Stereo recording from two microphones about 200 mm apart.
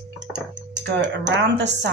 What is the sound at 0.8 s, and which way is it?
Speech, 60° right (ahead or behind).